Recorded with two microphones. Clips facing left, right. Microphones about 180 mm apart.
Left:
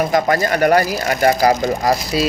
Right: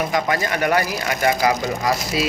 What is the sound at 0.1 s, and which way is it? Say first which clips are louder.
Speech: left 5 dB; 40° left (ahead or behind).